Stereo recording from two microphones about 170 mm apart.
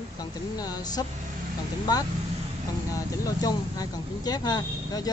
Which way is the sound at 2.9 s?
20° left (ahead or behind).